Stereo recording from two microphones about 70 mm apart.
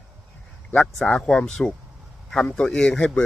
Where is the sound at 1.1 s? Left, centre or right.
Centre.